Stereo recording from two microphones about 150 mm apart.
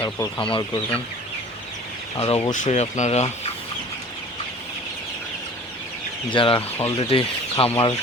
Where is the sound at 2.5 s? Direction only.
50° left (ahead or behind).